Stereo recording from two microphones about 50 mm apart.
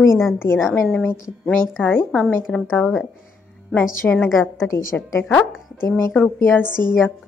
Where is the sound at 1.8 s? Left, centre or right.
Left.